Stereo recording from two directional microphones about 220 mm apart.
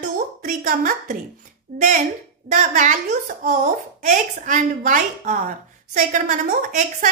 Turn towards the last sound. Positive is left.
turn(degrees=-35)  # may be behind; listen again after turning